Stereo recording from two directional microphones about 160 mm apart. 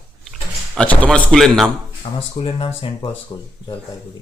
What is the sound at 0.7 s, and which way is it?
A man's voice, 5° left (ahead or behind).